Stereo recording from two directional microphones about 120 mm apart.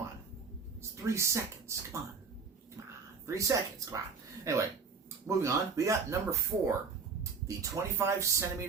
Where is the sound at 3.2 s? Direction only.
25° right (ahead or behind).